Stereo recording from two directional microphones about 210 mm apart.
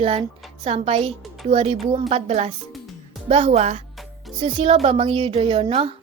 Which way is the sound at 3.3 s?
30° right (ahead or behind).